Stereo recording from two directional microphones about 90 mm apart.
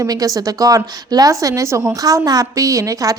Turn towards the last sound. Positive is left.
turn(degrees=-40)  # may be behind; listen again after turning